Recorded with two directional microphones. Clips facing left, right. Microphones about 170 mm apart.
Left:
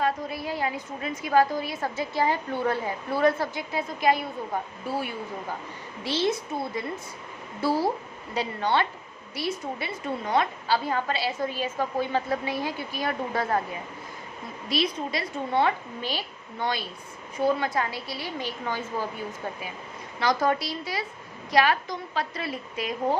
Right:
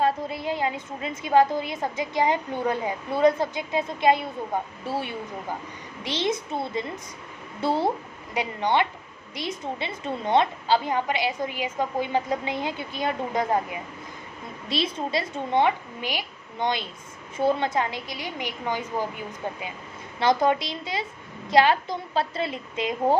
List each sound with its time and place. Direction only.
0.0 s a woman's voice: 25° right (ahead or behind)
6.0 s a woman's voice: 20° right (ahead or behind)
14.7 s a woman's voice: 25° right (ahead or behind)
20.1 s a woman's voice: 25° right (ahead or behind)